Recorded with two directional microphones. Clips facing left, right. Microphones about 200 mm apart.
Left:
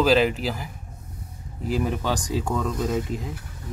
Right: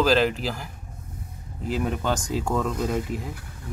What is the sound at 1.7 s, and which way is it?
Speech, centre (ahead or behind).